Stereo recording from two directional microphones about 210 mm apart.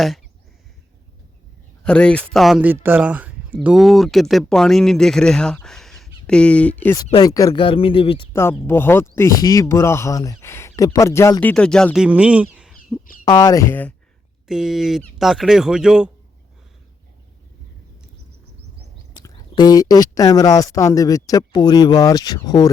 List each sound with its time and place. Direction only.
1.8 s speech: 5° left (ahead or behind)
7.0 s speech: 20° left (ahead or behind)
8.3 s speech: 10° left (ahead or behind); by 13.0 s 5° right (ahead or behind)
13.2 s speech: 20° left (ahead or behind)
14.4 s speech: centre (ahead or behind)
19.1 s speech: 20° left (ahead or behind)